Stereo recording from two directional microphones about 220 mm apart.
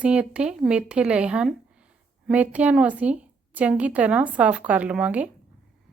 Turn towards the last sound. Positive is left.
turn(degrees=-5)  # may be behind; listen again after turning